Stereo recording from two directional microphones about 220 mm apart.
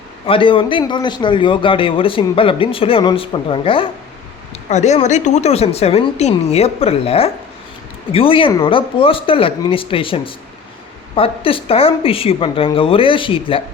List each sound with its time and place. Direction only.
0.3 s a man's voice: 25° left (ahead or behind)